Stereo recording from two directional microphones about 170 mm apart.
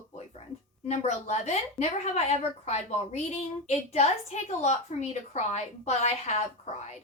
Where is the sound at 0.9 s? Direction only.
45° left (ahead or behind).